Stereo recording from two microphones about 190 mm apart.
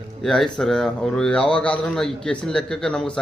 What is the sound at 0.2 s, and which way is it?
Speech, centre (ahead or behind).